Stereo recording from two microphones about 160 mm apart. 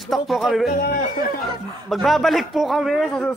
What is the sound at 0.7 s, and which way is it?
Speech, 70° left (ahead or behind).